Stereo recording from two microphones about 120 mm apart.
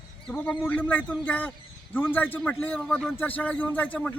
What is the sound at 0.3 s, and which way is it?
A man's voice, 15° left (ahead or behind).